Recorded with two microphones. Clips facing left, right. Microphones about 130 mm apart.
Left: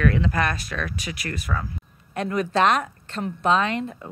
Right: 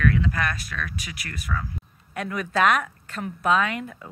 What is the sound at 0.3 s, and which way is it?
Speech, 30° left (ahead or behind).